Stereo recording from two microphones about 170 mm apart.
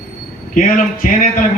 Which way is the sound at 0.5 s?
50° left (ahead or behind).